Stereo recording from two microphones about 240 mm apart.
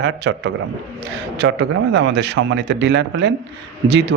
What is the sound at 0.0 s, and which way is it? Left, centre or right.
A man's voice, right.